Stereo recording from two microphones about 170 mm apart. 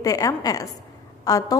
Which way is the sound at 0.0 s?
20° left (ahead or behind).